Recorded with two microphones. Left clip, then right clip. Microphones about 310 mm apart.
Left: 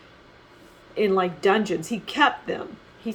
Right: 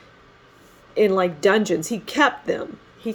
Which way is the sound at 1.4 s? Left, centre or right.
Right.